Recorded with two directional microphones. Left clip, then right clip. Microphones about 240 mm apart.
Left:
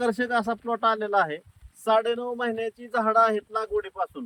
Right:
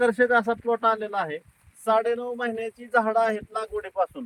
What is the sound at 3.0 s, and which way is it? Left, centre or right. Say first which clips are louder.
Speech: left 2 dB; right.